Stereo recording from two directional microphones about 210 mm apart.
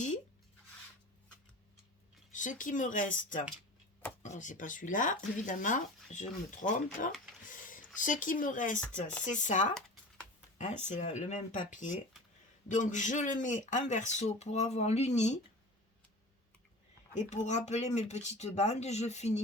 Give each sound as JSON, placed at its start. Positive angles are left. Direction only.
{"t": 2.3, "sound": "speech", "side_deg": 35}
{"t": 17.2, "sound": "speech", "side_deg": 35}